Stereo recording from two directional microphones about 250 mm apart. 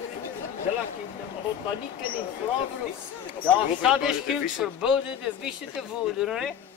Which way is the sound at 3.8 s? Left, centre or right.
Centre.